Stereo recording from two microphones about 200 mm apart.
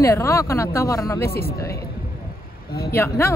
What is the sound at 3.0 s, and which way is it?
Speech, 15° left (ahead or behind).